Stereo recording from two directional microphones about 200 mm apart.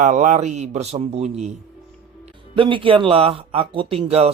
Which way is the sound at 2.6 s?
25° right (ahead or behind).